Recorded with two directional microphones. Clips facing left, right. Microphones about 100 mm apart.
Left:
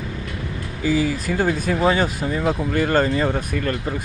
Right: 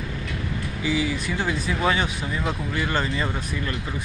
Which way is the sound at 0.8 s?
40° left (ahead or behind).